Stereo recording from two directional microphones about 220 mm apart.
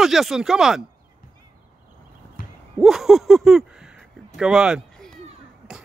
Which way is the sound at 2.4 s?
40° left (ahead or behind).